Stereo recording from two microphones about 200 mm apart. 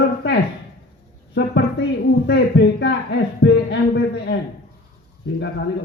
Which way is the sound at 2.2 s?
60° left (ahead or behind).